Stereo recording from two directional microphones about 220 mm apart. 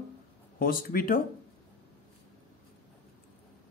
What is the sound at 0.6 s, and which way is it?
Speech, 40° left (ahead or behind).